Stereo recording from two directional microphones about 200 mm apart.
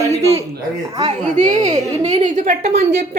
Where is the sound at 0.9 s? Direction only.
35° right (ahead or behind).